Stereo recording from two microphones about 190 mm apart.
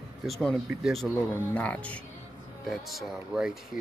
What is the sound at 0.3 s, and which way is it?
Speech, centre (ahead or behind).